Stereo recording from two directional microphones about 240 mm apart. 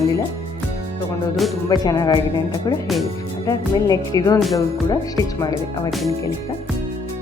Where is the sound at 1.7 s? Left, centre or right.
Centre.